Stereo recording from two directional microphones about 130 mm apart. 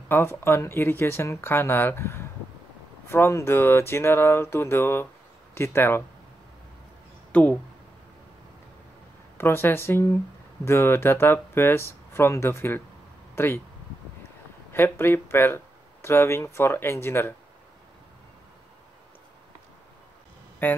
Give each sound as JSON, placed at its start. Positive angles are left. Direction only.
{"t": 0.1, "sound": "speech", "side_deg": 20}
{"t": 7.3, "sound": "speech", "side_deg": 10}
{"t": 9.4, "sound": "speech", "side_deg": 15}
{"t": 14.7, "sound": "speech", "side_deg": 20}
{"t": 20.6, "sound": "speech", "side_deg": 15}